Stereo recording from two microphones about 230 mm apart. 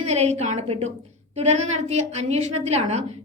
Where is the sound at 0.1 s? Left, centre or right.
Right.